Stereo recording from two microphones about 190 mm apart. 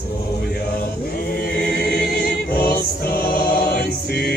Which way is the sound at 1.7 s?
55° left (ahead or behind).